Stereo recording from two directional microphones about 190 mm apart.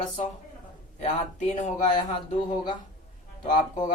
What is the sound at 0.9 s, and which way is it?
Speech, 35° left (ahead or behind).